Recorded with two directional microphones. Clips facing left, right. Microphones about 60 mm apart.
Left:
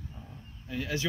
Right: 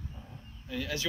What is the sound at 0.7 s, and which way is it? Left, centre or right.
Speech, left.